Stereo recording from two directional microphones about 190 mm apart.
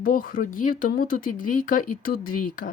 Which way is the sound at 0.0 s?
45° left (ahead or behind).